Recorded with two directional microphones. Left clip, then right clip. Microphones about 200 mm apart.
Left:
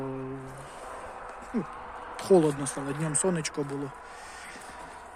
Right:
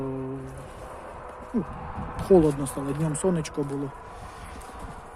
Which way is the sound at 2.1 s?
5° right (ahead or behind).